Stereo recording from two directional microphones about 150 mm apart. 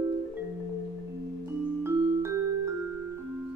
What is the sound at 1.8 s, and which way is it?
Music, 15° right (ahead or behind).